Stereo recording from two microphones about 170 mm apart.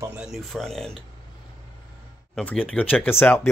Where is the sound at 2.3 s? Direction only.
5° left (ahead or behind).